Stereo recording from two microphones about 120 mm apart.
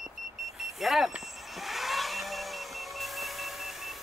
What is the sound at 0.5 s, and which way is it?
Vehicle, centre (ahead or behind).